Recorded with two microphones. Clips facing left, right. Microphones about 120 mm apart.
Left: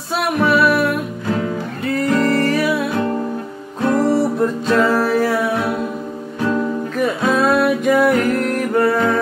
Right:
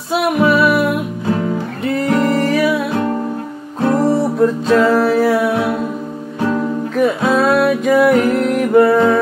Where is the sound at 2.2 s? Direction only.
15° right (ahead or behind).